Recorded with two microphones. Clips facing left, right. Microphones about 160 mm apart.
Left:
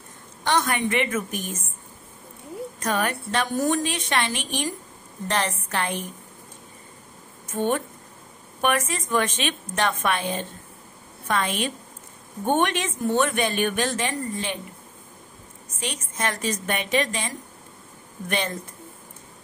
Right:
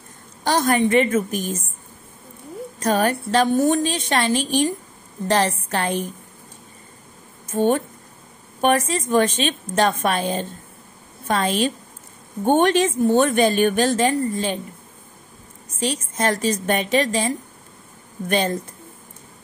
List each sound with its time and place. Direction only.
0.4 s speech: 35° right (ahead or behind)
2.8 s speech: 35° right (ahead or behind)
7.5 s speech: 30° right (ahead or behind)
15.8 s speech: 35° right (ahead or behind)
18.3 s speech: 40° right (ahead or behind)